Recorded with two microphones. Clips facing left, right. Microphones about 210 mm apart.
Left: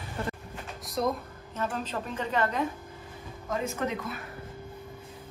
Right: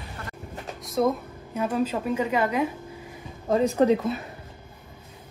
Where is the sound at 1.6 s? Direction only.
10° right (ahead or behind).